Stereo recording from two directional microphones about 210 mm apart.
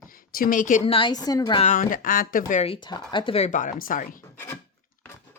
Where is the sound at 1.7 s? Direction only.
40° left (ahead or behind).